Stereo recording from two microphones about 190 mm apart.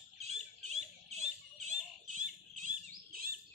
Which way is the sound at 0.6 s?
35° right (ahead or behind).